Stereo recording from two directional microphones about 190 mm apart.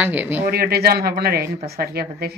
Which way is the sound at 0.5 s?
55° right (ahead or behind).